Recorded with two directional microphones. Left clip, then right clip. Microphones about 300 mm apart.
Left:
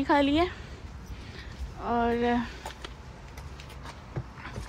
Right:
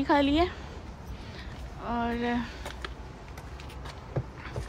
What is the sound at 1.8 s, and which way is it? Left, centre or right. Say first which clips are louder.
Speech: left 4 dB; centre.